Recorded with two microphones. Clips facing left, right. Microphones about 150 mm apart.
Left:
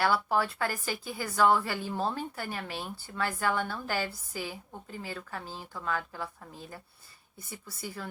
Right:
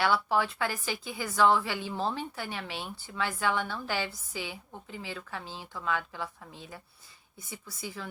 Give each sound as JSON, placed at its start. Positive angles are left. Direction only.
{"t": 0.0, "sound": "speech", "side_deg": 45}